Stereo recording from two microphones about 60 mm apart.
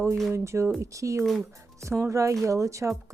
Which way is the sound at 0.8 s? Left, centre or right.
Right.